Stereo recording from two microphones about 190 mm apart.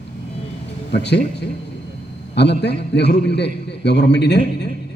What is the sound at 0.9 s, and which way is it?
Speech, 65° left (ahead or behind).